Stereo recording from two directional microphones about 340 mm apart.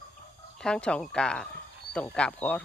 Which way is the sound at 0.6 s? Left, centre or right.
Centre.